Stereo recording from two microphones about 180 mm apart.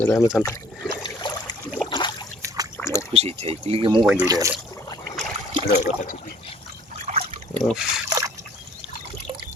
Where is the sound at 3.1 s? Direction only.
35° right (ahead or behind).